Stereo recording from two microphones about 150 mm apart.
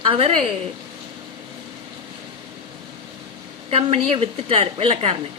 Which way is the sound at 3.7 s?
40° right (ahead or behind).